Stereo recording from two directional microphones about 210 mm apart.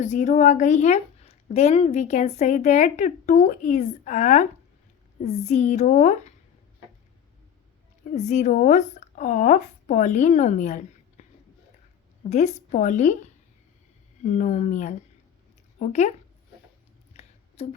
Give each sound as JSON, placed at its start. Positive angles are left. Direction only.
{"t": 0.0, "sound": "speech", "side_deg": 35}
{"t": 8.1, "sound": "speech", "side_deg": 35}
{"t": 12.3, "sound": "speech", "side_deg": 35}
{"t": 14.3, "sound": "speech", "side_deg": 35}
{"t": 17.2, "sound": "a sound", "side_deg": 30}